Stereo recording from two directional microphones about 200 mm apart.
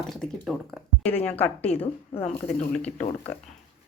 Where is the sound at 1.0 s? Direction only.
30° left (ahead or behind).